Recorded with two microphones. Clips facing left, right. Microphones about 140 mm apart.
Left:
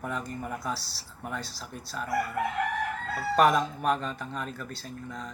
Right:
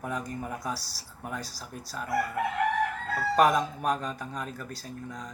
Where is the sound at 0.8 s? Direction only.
40° right (ahead or behind).